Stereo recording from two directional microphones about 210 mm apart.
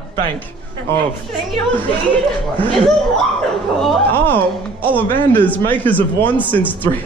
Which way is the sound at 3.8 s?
10° left (ahead or behind).